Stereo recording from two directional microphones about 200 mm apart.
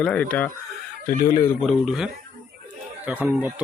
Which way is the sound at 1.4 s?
Centre (ahead or behind).